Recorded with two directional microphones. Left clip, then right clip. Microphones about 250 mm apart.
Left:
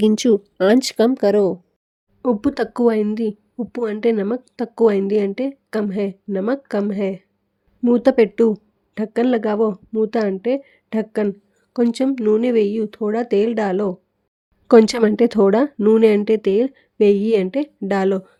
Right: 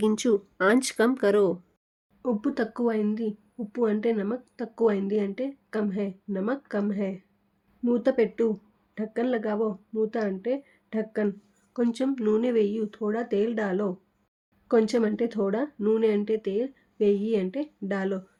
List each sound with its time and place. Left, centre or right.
0.0 s speech: left
2.2 s speech: left